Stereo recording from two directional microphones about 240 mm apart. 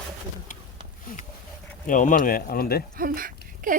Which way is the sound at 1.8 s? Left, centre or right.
Left.